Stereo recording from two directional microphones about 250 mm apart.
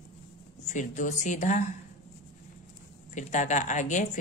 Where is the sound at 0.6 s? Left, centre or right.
Left.